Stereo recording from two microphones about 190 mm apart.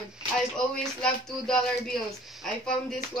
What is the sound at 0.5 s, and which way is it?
Speech, 5° left (ahead or behind).